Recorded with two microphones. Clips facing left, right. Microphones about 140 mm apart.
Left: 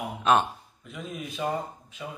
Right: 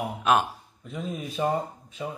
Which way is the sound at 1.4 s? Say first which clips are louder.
Right 4 dB; 30° right (ahead or behind).